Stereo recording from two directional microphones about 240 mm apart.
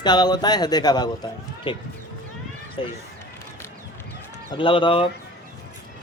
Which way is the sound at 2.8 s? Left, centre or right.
Left.